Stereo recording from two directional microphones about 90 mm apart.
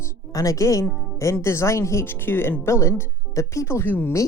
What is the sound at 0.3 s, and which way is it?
Speech, 40° left (ahead or behind).